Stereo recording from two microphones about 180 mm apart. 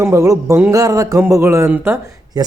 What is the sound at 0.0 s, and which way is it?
Speech, 15° right (ahead or behind).